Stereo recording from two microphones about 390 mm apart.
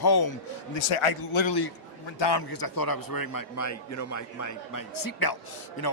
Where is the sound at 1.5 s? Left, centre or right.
Left.